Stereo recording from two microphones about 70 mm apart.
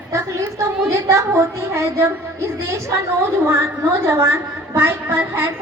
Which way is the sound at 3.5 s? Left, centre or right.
Right.